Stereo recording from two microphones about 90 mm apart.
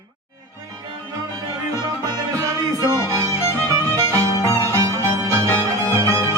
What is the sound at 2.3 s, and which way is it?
Music, 40° right (ahead or behind).